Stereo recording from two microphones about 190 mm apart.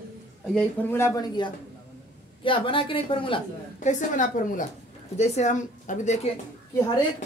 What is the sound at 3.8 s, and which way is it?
Speech, 40° left (ahead or behind).